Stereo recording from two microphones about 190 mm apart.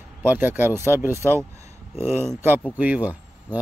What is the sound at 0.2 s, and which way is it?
Speech, 10° right (ahead or behind).